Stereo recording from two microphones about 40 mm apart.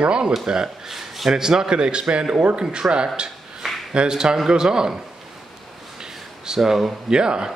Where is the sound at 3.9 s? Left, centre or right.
Right.